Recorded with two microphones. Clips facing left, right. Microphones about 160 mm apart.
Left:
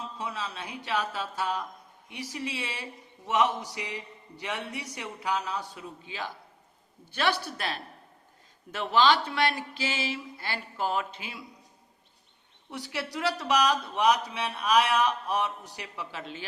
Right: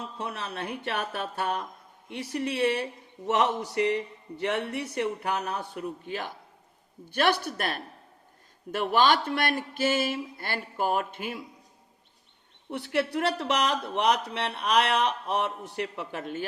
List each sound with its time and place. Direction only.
0.2 s speech: 60° right (ahead or behind)
13.4 s speech: 60° right (ahead or behind)